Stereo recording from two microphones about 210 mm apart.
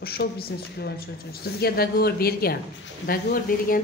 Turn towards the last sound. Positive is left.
turn(degrees=40)  # may be behind; listen again after turning